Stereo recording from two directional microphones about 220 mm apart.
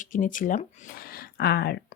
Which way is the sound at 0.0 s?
35° left (ahead or behind).